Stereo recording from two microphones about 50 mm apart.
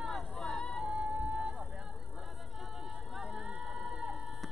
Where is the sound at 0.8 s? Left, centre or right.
Centre.